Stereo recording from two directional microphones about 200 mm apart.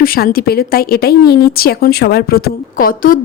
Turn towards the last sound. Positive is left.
turn(degrees=45)  # may be behind; listen again after turning